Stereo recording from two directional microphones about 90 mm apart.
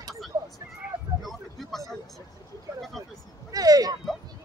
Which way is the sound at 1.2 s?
Centre (ahead or behind).